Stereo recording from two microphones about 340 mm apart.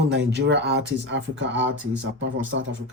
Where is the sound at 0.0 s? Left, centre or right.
Right.